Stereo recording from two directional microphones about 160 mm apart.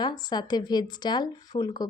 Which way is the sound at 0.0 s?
25° left (ahead or behind).